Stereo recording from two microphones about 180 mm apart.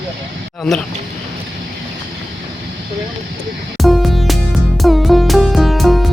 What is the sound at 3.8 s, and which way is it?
Music, centre (ahead or behind).